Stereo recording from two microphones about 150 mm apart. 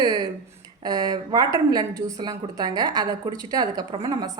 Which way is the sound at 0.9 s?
30° right (ahead or behind).